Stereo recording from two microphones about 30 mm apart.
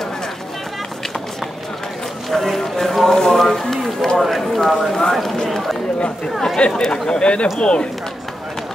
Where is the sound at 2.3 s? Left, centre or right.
Centre.